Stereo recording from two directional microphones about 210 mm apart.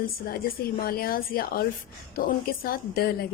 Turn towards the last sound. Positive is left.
turn(degrees=45)  # may be behind; listen again after turning